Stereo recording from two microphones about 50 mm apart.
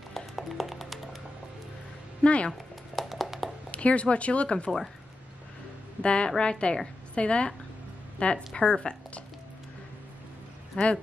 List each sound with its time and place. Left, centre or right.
0.4 s music: centre
2.2 s speech: left
2.5 s a sound: centre
3.7 s a woman's voice: left
6.0 s a woman's voice: left
10.8 s a woman's voice: left